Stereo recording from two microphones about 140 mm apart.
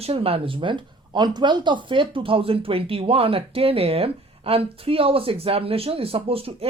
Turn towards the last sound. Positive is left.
turn(degrees=-40)  # may be behind; listen again after turning